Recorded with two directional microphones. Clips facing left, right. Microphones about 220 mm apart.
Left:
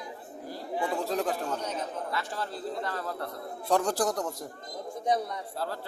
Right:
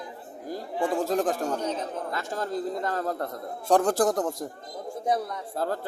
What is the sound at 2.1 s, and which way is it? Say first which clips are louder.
A man's voice: right 5 dB; 45° right (ahead or behind).